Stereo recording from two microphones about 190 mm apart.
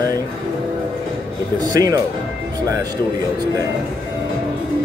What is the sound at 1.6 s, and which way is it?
Speech, 20° right (ahead or behind).